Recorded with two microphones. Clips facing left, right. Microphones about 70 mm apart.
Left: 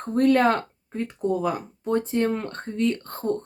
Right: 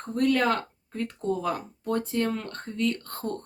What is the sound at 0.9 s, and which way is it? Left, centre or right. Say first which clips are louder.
Speech: left 4 dB; centre.